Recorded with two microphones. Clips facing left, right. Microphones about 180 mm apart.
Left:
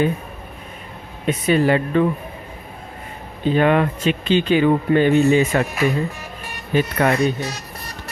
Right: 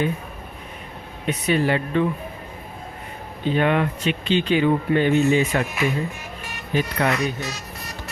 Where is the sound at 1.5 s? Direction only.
45° left (ahead or behind).